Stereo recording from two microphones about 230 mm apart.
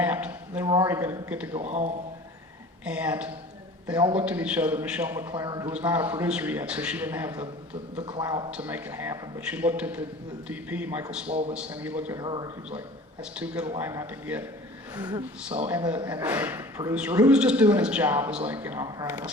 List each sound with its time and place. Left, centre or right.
0.0 s a man's voice: centre
1.5 s a man's voice: right
2.8 s a man's voice: centre
8.4 s a man's voice: centre
11.3 s a man's voice: right
11.5 s a man's voice: centre
12.2 s a man's voice: centre
13.4 s a man's voice: centre
16.0 s a man's voice: centre